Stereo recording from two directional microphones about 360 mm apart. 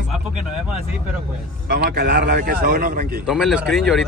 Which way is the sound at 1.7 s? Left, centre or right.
Right.